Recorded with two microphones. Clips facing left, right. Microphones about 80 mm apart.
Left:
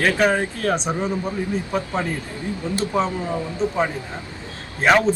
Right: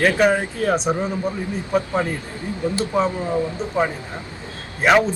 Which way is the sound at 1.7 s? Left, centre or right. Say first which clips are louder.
Right 3 dB; centre.